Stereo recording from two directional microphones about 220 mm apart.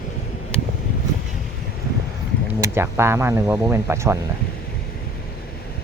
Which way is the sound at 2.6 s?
10° right (ahead or behind).